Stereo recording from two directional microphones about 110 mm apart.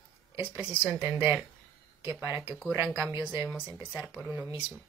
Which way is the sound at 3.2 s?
15° right (ahead or behind).